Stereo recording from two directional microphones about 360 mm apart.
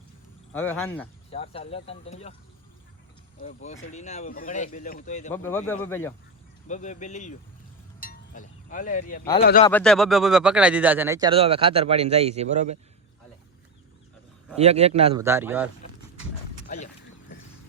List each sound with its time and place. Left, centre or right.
0.5 s speech: centre
1.3 s speech: centre
3.4 s speech: centre
5.3 s speech: centre
6.7 s speech: left
8.0 s cowbell: left
9.4 s speech: left
9.6 s speech: centre
14.5 s speech: centre
15.2 s speech: centre
16.6 s a sound: left